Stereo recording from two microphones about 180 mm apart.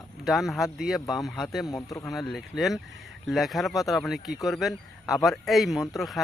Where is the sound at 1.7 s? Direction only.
20° left (ahead or behind).